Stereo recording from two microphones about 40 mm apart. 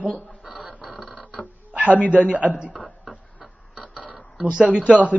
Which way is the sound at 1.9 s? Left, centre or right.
Left.